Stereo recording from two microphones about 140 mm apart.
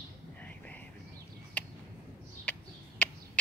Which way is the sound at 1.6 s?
10° left (ahead or behind).